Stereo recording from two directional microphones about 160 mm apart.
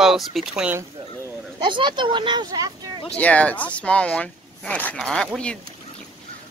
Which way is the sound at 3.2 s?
10° left (ahead or behind).